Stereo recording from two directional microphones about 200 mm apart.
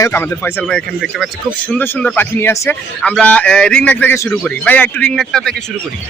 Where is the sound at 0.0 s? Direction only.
10° left (ahead or behind).